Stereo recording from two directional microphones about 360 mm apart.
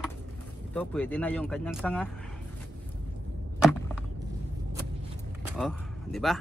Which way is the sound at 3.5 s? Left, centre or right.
Centre.